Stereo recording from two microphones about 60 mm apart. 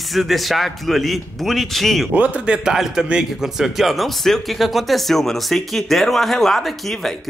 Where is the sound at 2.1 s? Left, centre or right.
Right.